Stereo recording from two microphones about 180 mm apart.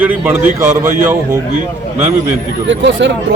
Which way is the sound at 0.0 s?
10° right (ahead or behind).